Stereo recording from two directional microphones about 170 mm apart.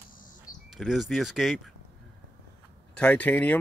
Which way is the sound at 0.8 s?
Centre (ahead or behind).